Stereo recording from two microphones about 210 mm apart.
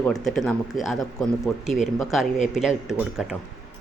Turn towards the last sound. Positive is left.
turn(degrees=-5)  # may be behind; listen again after turning